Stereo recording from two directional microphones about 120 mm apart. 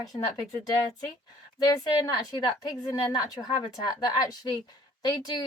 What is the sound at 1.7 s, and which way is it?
A woman's voice, 35° left (ahead or behind).